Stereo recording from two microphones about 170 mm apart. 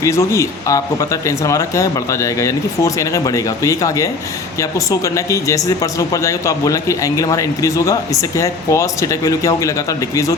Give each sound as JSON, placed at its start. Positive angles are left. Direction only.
{"t": 0.0, "sound": "speech", "side_deg": 15}